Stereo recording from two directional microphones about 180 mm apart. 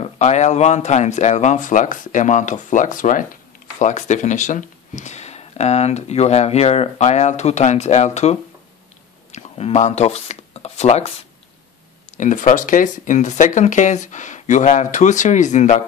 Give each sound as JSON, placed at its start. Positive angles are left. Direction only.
{"t": 0.0, "sound": "speech", "side_deg": 40}